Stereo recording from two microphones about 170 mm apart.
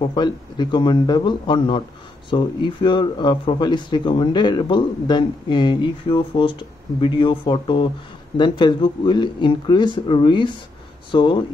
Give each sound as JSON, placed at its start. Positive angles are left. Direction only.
{"t": 0.0, "sound": "speech", "side_deg": 25}